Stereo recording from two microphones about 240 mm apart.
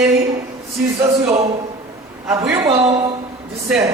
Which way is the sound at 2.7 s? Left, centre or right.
Right.